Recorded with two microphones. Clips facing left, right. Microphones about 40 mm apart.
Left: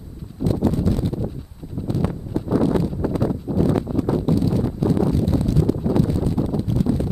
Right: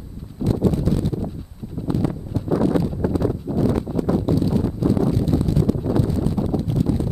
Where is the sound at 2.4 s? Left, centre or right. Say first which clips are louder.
Even; centre.